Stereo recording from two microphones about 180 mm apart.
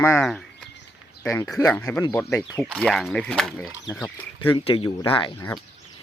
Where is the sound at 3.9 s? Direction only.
15° left (ahead or behind).